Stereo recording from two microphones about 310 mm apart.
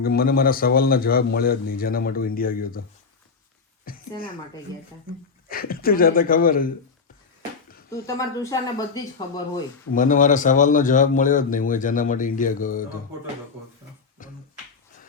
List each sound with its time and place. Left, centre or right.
0.0 s speech: left
3.9 s a sound: left
5.5 s speech: left
7.9 s speech: centre
9.9 s speech: left
14.2 s finger snapping: left